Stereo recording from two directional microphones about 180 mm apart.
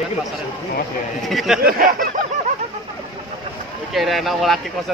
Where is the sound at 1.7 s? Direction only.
50° right (ahead or behind).